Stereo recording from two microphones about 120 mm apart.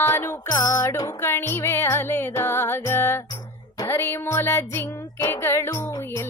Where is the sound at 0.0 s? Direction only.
20° left (ahead or behind).